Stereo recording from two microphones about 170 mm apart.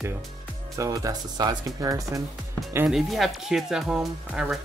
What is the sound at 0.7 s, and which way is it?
Speech, 20° right (ahead or behind).